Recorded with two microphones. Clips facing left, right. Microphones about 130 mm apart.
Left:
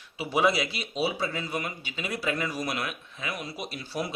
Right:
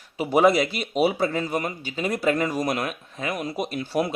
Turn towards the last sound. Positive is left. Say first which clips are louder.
# right 8 dB
turn(degrees=-55)  # may be behind; listen again after turning